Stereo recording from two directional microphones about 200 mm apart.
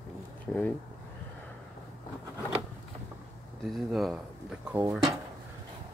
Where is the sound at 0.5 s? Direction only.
5° left (ahead or behind).